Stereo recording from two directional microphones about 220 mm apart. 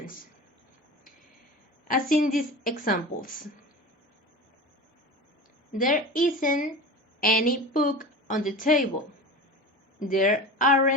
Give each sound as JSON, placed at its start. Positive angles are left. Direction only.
{"t": 1.9, "sound": "a woman's voice", "side_deg": 40}
{"t": 5.7, "sound": "a woman's voice", "side_deg": 40}
{"t": 10.0, "sound": "a woman's voice", "side_deg": 35}